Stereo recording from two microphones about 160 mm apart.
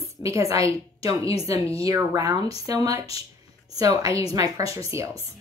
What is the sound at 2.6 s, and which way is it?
Speech, 20° right (ahead or behind).